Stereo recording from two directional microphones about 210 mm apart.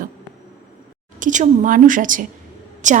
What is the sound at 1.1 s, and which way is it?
A woman's voice, 35° right (ahead or behind).